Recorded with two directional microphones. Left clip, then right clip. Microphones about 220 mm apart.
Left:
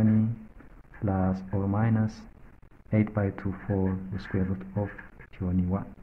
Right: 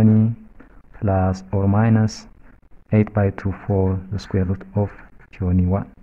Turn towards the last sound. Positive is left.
turn(degrees=-40)  # may be behind; listen again after turning